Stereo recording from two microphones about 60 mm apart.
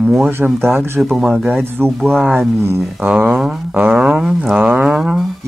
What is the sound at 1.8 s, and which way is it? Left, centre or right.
Speech, right.